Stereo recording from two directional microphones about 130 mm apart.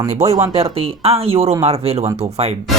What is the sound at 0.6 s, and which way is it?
Speech, 50° right (ahead or behind).